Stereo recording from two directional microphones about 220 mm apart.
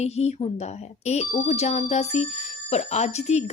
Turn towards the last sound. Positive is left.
turn(degrees=30)  # may be behind; listen again after turning